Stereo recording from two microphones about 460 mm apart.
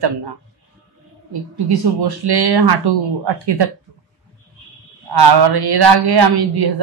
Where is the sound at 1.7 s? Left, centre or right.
Right.